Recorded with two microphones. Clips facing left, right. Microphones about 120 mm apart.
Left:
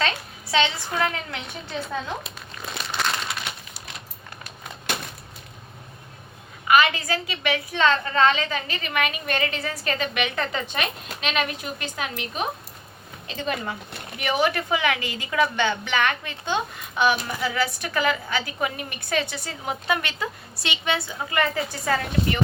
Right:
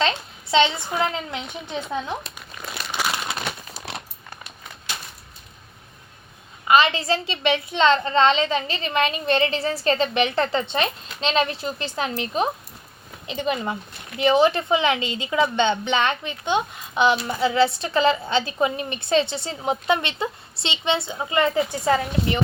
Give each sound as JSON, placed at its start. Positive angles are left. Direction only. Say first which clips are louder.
{"t": 0.5, "sound": "a woman's voice", "louder": "right 4 dB", "side_deg": -20}
{"t": 2.2, "sound": "crumpling", "louder": "even", "side_deg": 0}
{"t": 4.9, "sound": "a sound", "louder": "left 5 dB", "side_deg": 55}
{"t": 6.7, "sound": "a woman's voice", "louder": "right 2 dB", "side_deg": -25}
{"t": 13.2, "sound": "a woman's voice", "louder": "right 4 dB", "side_deg": -20}